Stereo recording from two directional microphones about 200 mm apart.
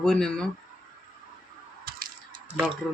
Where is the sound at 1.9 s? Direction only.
50° right (ahead or behind).